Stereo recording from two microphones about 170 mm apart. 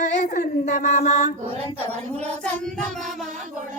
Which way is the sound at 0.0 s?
45° left (ahead or behind).